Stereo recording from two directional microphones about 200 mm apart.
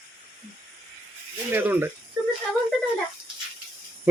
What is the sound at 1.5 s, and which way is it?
Speech, 10° right (ahead or behind).